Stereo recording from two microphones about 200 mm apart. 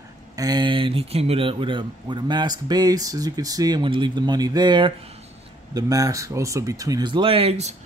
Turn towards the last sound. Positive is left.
turn(degrees=-30)  # may be behind; listen again after turning